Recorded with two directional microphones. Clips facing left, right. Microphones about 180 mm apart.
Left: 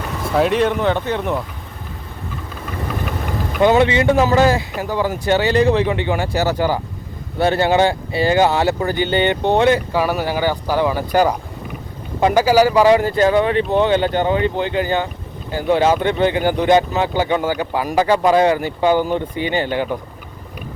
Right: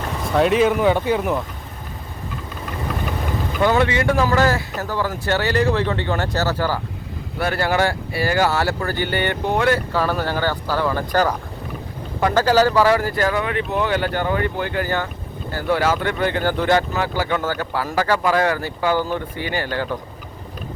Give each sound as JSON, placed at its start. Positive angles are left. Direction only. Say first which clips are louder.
{"t": 0.3, "sound": "speech", "louder": "even", "side_deg": 0}
{"t": 3.6, "sound": "speech", "louder": "left 4 dB", "side_deg": 20}